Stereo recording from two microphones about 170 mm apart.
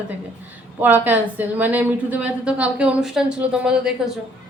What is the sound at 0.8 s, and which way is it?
A woman's voice, 10° right (ahead or behind).